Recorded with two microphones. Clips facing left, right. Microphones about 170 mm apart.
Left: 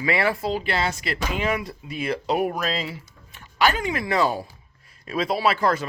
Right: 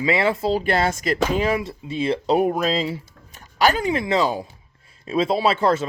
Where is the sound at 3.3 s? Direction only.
40° right (ahead or behind).